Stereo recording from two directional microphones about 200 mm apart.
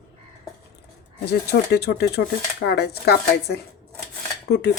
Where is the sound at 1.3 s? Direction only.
55° left (ahead or behind).